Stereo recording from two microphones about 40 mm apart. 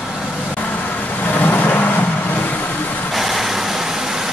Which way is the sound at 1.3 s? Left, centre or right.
Left.